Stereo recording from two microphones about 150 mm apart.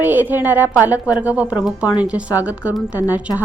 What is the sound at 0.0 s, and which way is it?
Speech, 10° right (ahead or behind).